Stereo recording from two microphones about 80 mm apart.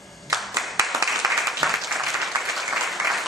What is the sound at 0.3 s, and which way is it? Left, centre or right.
Clapping, centre.